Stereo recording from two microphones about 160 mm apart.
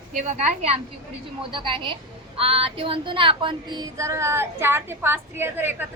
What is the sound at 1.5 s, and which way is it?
Speech, 30° right (ahead or behind).